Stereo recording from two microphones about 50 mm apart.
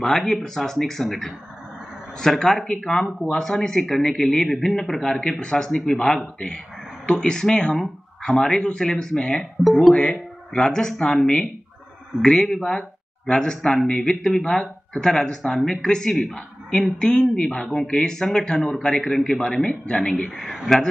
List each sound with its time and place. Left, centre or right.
0.0 s speech: centre
5.4 s speech: centre